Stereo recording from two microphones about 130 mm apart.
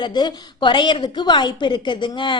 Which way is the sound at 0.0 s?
35° left (ahead or behind).